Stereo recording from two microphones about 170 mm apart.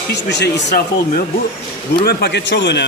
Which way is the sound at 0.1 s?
90° left.